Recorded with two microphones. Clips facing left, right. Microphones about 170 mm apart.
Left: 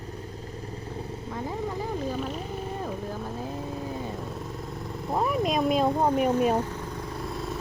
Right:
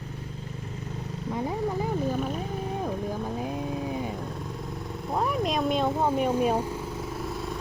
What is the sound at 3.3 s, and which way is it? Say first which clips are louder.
Vehicle: right 3 dB; 15° right (ahead or behind).